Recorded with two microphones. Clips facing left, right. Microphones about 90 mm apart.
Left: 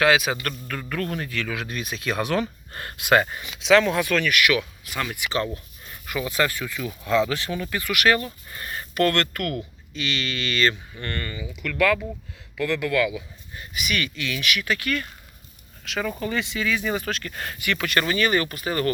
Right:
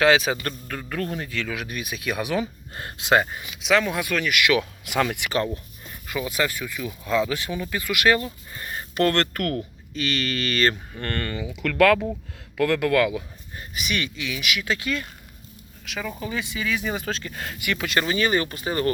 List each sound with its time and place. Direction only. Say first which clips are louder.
0.0 s speech: right 1 dB; 25° right (ahead or behind)
0.7 s speech: left 1 dB; 15° right (ahead or behind)
3.6 s speech: left 4 dB; 5° right (ahead or behind)
9.0 s speech: even; 30° right (ahead or behind)
14.0 s speech: left 1 dB; 10° right (ahead or behind)
15.8 s speech: left 4 dB; 5° right (ahead or behind); by 18.9 s 25° right (ahead or behind)